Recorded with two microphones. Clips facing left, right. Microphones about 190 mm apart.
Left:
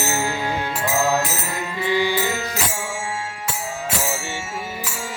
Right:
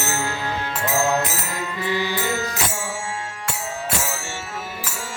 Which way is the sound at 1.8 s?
15° left (ahead or behind).